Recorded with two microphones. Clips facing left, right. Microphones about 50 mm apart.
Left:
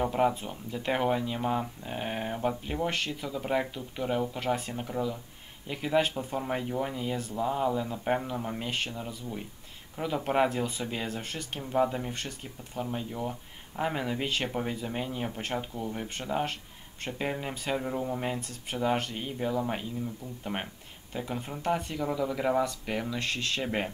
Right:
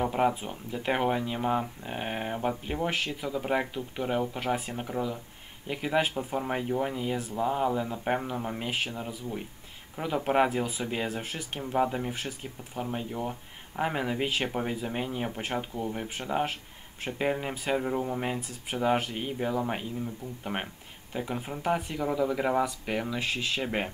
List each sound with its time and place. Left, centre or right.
0.0 s speech: centre